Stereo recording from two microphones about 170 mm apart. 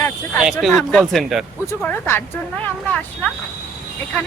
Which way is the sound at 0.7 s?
5° left (ahead or behind).